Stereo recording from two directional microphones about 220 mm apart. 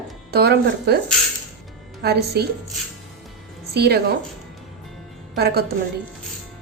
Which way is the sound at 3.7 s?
45° right (ahead or behind).